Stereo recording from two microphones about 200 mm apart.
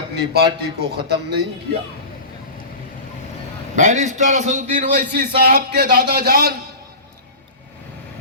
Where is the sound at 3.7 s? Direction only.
35° right (ahead or behind).